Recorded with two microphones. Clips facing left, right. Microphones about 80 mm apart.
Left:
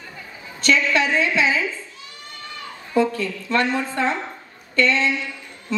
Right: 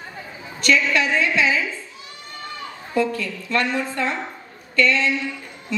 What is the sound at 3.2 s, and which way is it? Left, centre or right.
A woman's voice, left.